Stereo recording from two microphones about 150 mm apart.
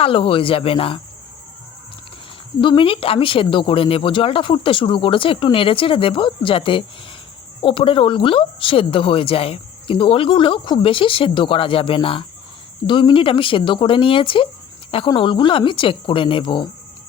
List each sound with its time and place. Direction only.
0.0 s speech: 35° left (ahead or behind)
2.6 s speech: 35° left (ahead or behind)